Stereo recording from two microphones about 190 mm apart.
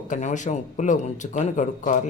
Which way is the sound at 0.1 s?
40° left (ahead or behind).